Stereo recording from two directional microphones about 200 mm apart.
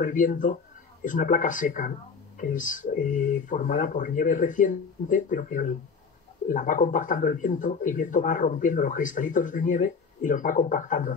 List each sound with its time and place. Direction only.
0.0 s speech: 40° left (ahead or behind)